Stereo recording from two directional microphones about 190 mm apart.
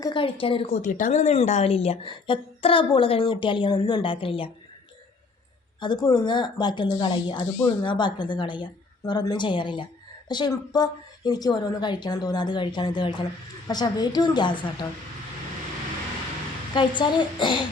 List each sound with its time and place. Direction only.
0.0 s a woman's voice: 25° left (ahead or behind)
0.7 s speech: 45° left (ahead or behind)
5.8 s speech: 20° left (ahead or behind)
16.7 s speech: 25° left (ahead or behind)